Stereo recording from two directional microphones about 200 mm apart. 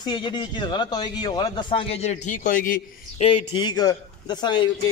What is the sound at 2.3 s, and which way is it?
Speech, 40° left (ahead or behind).